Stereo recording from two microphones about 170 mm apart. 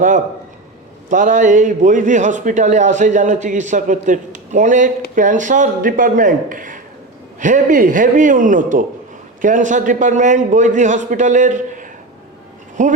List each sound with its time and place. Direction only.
1.1 s a man's voice: 50° right (ahead or behind)